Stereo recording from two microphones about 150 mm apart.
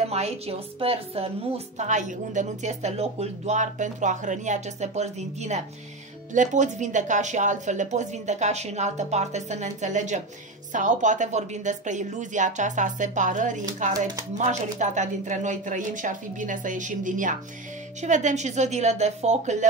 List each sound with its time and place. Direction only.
0.1 s a woman's voice: 45° right (ahead or behind)
1.8 s speech: 55° right (ahead or behind)